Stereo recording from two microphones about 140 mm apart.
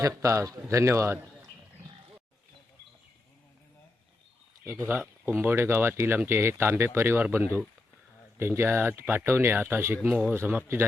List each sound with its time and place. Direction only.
0.0 s a man's voice: 20° right (ahead or behind)
4.6 s speech: 20° right (ahead or behind)